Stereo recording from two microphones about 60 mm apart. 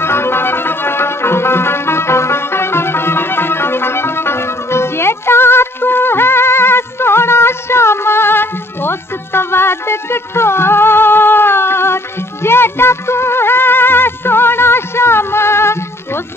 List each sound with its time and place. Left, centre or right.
0.0 s music: left